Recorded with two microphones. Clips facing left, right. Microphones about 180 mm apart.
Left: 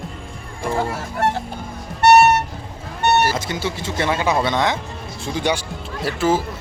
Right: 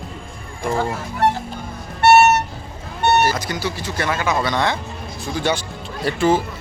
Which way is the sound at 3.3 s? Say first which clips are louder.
Even; 25° left (ahead or behind).